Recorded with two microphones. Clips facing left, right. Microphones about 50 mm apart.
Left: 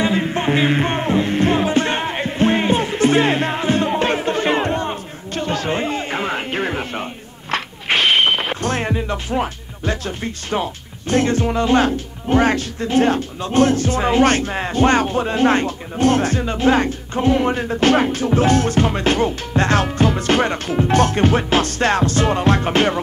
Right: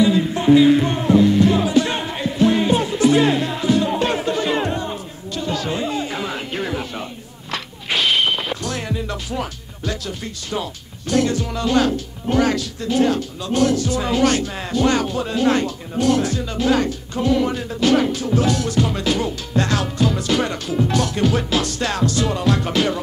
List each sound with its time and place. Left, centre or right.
0.0 s music: left